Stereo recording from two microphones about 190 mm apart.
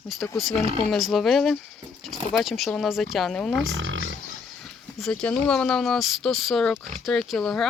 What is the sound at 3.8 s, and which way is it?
Roaring cats, 85° right.